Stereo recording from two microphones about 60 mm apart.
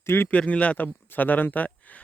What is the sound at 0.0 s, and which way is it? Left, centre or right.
Speech, left.